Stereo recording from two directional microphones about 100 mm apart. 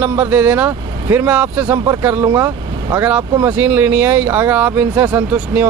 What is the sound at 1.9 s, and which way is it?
Speech, 25° right (ahead or behind).